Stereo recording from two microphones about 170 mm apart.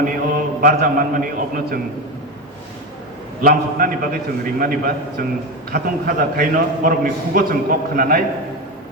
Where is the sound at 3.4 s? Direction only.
60° right (ahead or behind).